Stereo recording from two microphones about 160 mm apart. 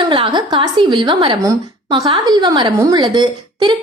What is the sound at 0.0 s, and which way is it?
A woman's voice, 30° right (ahead or behind).